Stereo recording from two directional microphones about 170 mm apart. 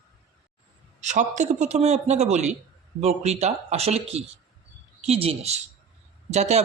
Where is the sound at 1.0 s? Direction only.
45° right (ahead or behind).